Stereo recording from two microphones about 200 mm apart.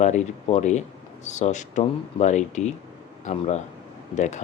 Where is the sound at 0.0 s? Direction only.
35° left (ahead or behind).